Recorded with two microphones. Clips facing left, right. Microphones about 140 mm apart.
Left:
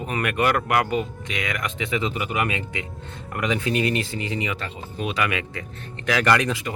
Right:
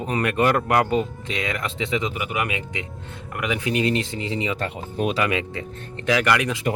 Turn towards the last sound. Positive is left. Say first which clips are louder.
# even
turn(degrees=-10)  # may be behind; listen again after turning